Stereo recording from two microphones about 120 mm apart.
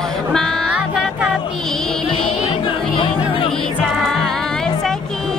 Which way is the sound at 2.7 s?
45° left (ahead or behind).